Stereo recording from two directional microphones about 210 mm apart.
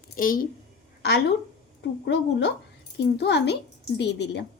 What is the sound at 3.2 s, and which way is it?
A woman's voice, 55° left (ahead or behind).